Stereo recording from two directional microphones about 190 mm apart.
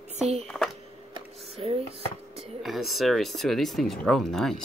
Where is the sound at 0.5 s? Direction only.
5° left (ahead or behind).